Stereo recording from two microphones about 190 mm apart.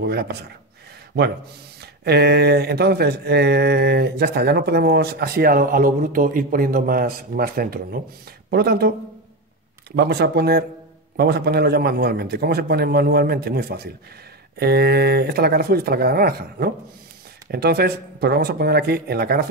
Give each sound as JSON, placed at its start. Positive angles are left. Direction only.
{"t": 0.0, "sound": "speech", "side_deg": -60}
{"t": 1.8, "sound": "speech", "side_deg": -60}
{"t": 9.9, "sound": "speech", "side_deg": -60}